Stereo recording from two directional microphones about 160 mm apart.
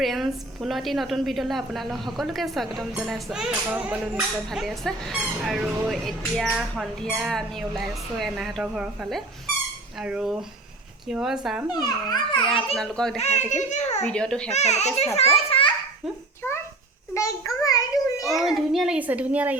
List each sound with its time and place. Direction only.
0.0 s a woman's voice: centre (ahead or behind)
11.7 s a child's voice: 25° left (ahead or behind)
12.7 s a woman's voice: 5° left (ahead or behind)
13.1 s a child's voice: 45° left (ahead or behind)
14.0 s a woman's voice: 5° left (ahead or behind)
14.5 s a child's voice: 45° left (ahead or behind)
17.2 s a sound: 20° left (ahead or behind)
18.3 s a child's voice: centre (ahead or behind)